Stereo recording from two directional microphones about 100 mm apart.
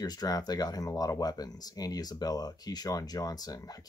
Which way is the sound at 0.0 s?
40° left (ahead or behind).